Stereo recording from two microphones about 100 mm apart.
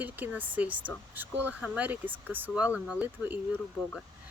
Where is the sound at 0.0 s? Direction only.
15° right (ahead or behind).